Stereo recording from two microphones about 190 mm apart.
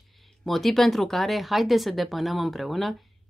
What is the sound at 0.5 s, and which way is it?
A woman's voice, centre (ahead or behind).